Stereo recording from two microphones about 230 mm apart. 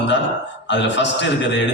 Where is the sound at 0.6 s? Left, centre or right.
Left.